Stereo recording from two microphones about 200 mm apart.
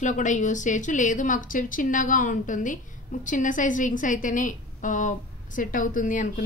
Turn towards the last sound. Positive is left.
turn(degrees=40)  # may be behind; listen again after turning